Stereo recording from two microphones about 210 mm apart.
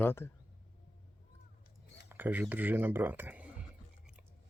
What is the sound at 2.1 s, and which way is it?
Speech, 10° right (ahead or behind).